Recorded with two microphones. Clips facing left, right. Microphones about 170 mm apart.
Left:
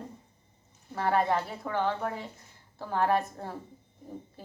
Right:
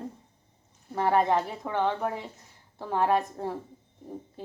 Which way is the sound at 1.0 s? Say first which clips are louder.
Right 3 dB; 20° right (ahead or behind).